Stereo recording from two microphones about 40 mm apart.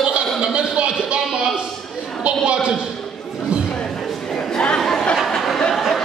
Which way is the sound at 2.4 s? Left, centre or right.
Right.